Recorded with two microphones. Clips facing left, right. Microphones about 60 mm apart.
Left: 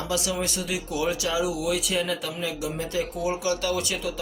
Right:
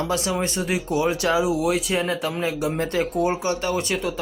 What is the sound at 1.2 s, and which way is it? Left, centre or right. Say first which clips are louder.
Speech: right 5 dB; right.